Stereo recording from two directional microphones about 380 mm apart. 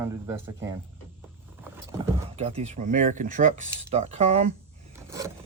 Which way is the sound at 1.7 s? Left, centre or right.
Centre.